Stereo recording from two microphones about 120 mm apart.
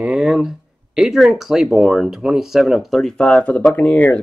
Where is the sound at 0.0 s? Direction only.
5° right (ahead or behind).